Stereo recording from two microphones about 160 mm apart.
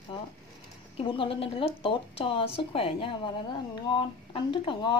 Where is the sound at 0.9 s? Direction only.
35° left (ahead or behind).